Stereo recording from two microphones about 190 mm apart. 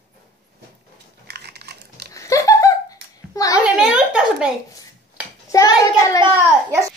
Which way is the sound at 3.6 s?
5° right (ahead or behind).